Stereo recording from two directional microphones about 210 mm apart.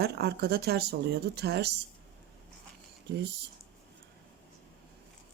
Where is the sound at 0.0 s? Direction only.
50° right (ahead or behind).